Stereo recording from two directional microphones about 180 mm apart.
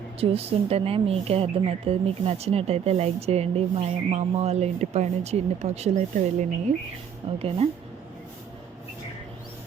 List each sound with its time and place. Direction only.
0.2 s speech: 35° right (ahead or behind)